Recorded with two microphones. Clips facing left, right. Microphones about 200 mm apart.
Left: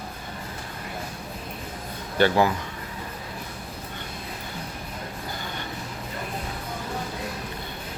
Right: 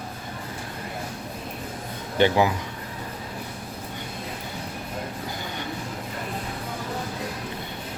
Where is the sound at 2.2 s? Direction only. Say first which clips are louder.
Even; 15° right (ahead or behind).